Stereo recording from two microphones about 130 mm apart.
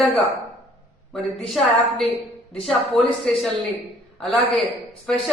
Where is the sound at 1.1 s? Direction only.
Centre (ahead or behind).